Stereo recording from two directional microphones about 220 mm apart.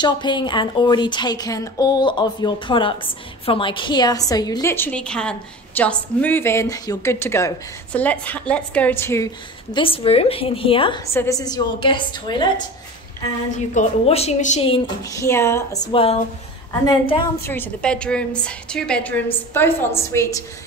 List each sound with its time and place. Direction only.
0.0 s a woman's voice: 20° left (ahead or behind)
9.8 s a woman's voice: 25° left (ahead or behind)
13.7 s a woman's voice: 30° left (ahead or behind)
15.1 s a woman's voice: 10° left (ahead or behind)
17.4 s a woman's voice: 10° left (ahead or behind)